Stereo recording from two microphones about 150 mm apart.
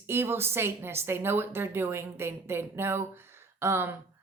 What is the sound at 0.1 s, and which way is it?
A woman's voice, 15° right (ahead or behind).